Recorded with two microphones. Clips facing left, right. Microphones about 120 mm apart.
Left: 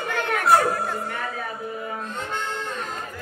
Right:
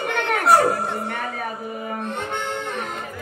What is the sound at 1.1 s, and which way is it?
Speech, 65° right (ahead or behind).